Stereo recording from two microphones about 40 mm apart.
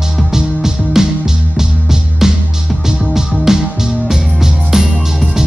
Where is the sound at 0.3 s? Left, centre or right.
Centre.